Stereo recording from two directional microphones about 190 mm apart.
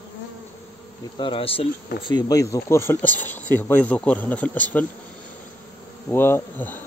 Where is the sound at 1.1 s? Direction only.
25° left (ahead or behind).